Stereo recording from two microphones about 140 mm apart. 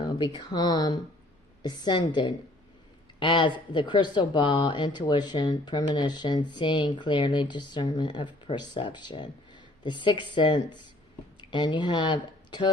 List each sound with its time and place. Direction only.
0.0 s speech: 30° left (ahead or behind)